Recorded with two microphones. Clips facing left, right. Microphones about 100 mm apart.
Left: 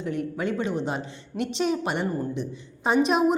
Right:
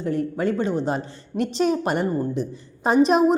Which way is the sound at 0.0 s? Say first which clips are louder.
Right 5 dB; 40° right (ahead or behind).